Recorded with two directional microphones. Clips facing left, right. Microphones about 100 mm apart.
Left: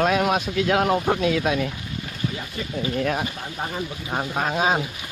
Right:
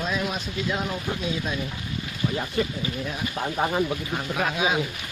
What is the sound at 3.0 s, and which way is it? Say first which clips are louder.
Speech: left 11 dB; 65° left (ahead or behind).